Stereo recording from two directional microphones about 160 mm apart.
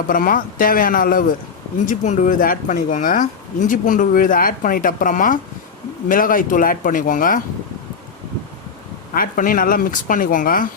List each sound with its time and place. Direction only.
0.1 s speech: 60° left (ahead or behind)
1.9 s speech: 50° left (ahead or behind)
9.1 s speech: 60° left (ahead or behind)